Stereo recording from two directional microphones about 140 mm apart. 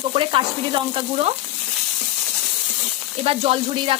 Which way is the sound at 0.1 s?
40° right (ahead or behind).